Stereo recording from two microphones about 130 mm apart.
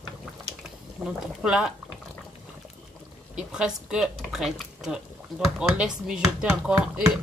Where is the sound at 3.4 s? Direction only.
5° right (ahead or behind).